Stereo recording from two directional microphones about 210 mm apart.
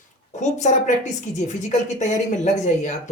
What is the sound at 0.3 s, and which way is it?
Speech, 35° left (ahead or behind).